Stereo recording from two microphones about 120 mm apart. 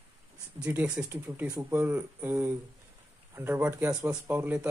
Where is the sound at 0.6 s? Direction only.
15° right (ahead or behind).